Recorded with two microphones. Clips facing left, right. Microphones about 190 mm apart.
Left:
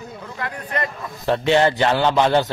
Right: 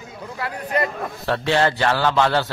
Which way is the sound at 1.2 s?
20° left (ahead or behind).